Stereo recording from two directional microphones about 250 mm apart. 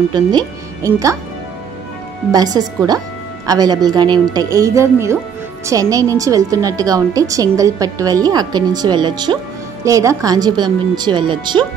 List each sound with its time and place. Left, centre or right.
0.1 s a woman's voice: centre
2.3 s a woman's voice: centre